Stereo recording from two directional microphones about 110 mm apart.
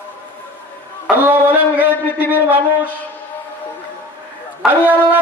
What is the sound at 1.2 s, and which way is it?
Music, 20° right (ahead or behind).